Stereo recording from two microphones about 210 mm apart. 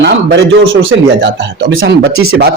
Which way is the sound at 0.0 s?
55° right (ahead or behind).